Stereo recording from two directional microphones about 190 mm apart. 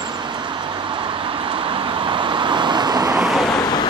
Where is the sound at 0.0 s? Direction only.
25° right (ahead or behind).